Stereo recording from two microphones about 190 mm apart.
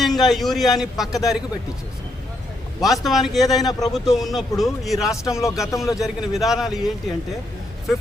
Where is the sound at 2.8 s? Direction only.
Centre (ahead or behind).